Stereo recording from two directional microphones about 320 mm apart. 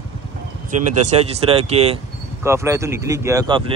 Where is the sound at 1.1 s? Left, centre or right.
Centre.